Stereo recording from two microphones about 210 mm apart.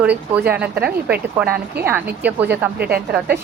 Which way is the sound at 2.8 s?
50° right (ahead or behind).